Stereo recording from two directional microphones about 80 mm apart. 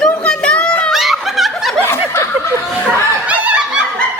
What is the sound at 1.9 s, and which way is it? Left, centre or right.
Snicker, left.